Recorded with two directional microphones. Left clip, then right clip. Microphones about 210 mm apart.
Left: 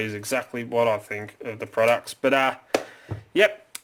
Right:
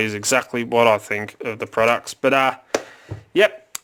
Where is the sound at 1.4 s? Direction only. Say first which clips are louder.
Right 3 dB; 35° right (ahead or behind).